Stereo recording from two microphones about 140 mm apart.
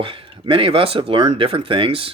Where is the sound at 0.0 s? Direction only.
40° right (ahead or behind).